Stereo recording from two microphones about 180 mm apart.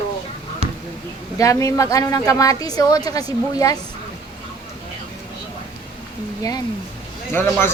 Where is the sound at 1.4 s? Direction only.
20° left (ahead or behind).